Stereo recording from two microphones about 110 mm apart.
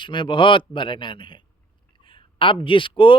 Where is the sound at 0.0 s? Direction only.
45° left (ahead or behind).